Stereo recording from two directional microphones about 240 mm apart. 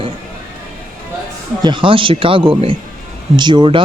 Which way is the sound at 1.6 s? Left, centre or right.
Centre.